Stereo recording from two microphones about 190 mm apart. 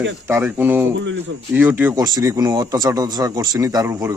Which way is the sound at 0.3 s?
10° right (ahead or behind).